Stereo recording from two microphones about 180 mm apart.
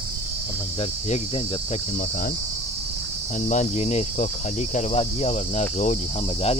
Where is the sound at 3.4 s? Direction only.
40° left (ahead or behind).